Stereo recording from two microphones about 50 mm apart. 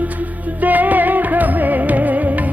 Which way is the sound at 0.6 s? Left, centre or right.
Right.